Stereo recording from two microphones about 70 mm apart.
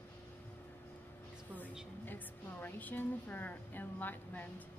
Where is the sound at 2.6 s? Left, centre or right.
Left.